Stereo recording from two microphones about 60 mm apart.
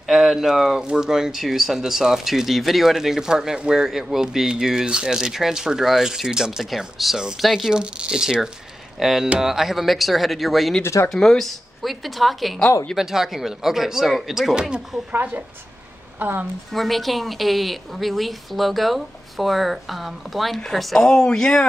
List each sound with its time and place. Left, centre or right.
0.0 s speech: centre
7.7 s a woman's voice: centre
14.5 s speech: centre
16.2 s a woman's voice: right
16.7 s a woman's voice: centre